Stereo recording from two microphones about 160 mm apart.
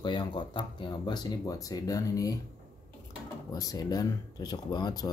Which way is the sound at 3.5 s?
20° left (ahead or behind).